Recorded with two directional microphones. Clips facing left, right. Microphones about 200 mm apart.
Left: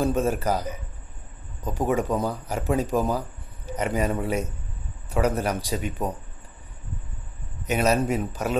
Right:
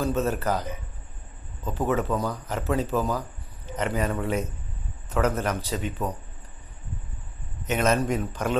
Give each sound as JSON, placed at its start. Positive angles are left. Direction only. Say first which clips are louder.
{"t": 0.0, "sound": "a man's voice", "louder": "left 2 dB", "side_deg": 10}
{"t": 7.6, "sound": "speech", "louder": "left 1 dB", "side_deg": 10}